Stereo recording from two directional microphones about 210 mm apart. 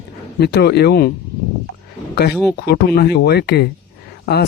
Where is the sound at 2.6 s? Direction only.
50° left (ahead or behind).